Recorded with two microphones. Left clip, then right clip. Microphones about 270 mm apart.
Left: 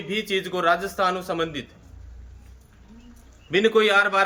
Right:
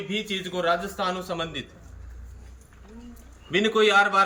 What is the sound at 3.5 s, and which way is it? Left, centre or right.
Speech, centre.